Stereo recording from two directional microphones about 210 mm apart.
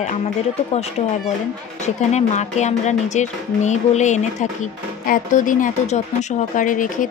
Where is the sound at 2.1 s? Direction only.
35° left (ahead or behind).